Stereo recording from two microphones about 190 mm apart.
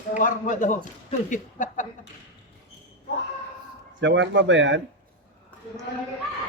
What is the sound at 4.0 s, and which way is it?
Speech, 70° right (ahead or behind).